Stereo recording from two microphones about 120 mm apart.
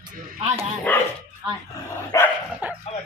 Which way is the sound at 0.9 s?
15° left (ahead or behind).